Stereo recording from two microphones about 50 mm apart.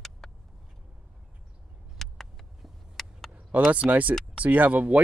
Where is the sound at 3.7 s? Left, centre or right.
Right.